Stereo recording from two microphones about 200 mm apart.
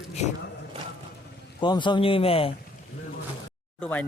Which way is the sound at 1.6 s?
25° left (ahead or behind).